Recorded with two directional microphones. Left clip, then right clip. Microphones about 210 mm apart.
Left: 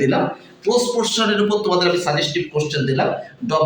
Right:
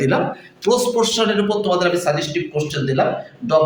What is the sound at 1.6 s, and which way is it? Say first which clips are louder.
Speech: even; 35° right (ahead or behind).